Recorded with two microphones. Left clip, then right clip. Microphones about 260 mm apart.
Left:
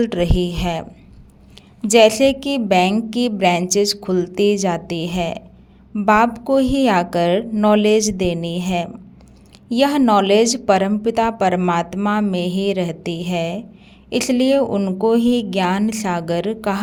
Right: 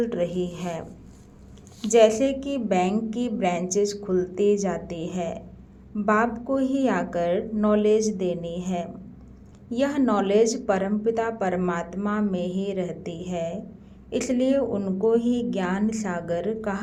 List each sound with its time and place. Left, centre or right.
0.0 s a woman's voice: left
1.9 s a woman's voice: left